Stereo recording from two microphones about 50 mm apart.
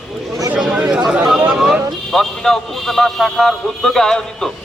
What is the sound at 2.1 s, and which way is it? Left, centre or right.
A man's voice, centre.